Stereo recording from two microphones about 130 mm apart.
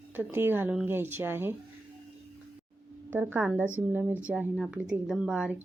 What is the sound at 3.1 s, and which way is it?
Speech, 15° right (ahead or behind).